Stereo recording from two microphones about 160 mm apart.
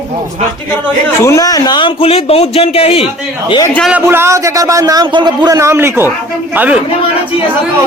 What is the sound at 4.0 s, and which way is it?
A man's voice, 15° right (ahead or behind).